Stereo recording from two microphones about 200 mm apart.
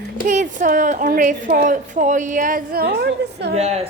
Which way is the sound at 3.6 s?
35° right (ahead or behind).